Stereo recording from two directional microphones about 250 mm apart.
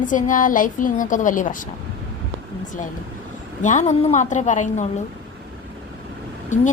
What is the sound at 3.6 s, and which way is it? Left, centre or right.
A woman's voice, left.